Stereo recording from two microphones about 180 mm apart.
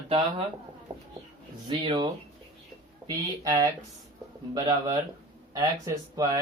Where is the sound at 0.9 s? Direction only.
25° right (ahead or behind).